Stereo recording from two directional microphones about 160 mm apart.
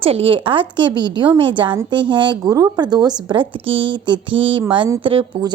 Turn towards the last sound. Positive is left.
turn(degrees=-35)  # may be behind; listen again after turning